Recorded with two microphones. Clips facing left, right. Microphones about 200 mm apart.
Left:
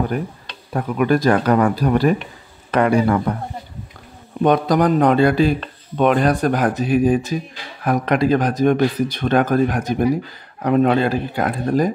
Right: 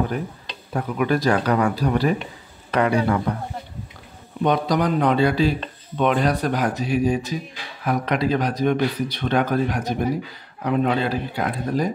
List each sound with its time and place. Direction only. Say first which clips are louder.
0.7 s a man's voice: left 4 dB; 50° left (ahead or behind)
4.4 s a man's voice: left 5 dB; 50° left (ahead or behind)